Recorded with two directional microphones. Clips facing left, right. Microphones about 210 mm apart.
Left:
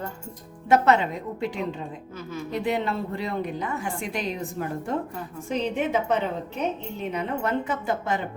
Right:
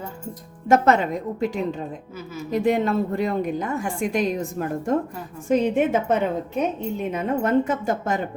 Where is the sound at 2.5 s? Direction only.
45° right (ahead or behind).